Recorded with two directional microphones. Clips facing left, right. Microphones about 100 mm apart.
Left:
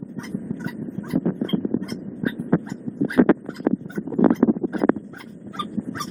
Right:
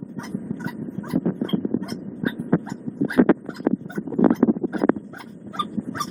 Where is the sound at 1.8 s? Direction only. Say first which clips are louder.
Even; 15° right (ahead or behind).